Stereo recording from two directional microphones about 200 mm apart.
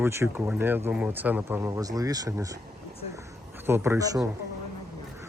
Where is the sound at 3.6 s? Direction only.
10° right (ahead or behind).